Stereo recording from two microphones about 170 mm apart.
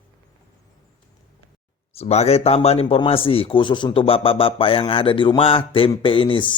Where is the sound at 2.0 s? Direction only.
40° left (ahead or behind).